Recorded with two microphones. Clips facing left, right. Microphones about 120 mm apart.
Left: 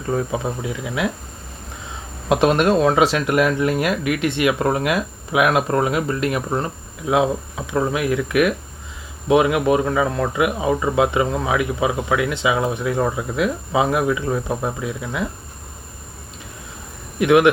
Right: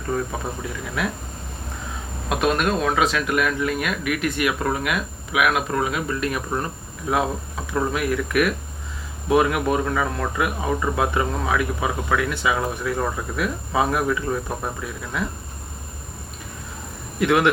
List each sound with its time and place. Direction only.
0.1 s speech: 20° left (ahead or behind)
2.3 s speech: 30° left (ahead or behind)
7.7 s speech: 15° left (ahead or behind)
17.2 s speech: 15° left (ahead or behind)